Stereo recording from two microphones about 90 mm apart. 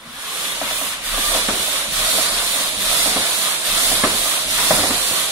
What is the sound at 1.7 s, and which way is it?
Steam, 25° right (ahead or behind).